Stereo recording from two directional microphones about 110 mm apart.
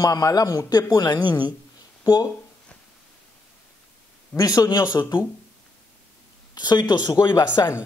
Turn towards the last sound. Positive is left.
turn(degrees=35)  # may be behind; listen again after turning